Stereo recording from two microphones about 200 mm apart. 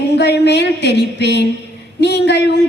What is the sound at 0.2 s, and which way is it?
A woman's voice, 55° left (ahead or behind).